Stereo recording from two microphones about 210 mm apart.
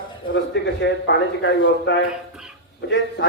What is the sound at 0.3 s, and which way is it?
A man's voice, 60° left (ahead or behind).